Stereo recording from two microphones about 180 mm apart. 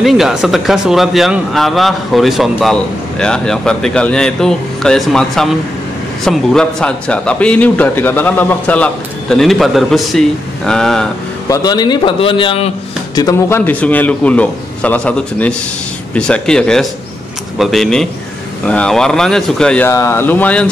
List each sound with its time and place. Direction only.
0.0 s speech: centre (ahead or behind)
11.4 s a man's voice: 20° left (ahead or behind)
13.1 s a man's voice: 20° left (ahead or behind)